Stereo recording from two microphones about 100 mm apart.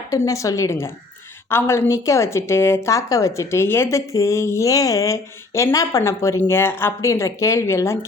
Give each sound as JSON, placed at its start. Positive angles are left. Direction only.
{"t": 0.1, "sound": "a woman's voice", "side_deg": 35}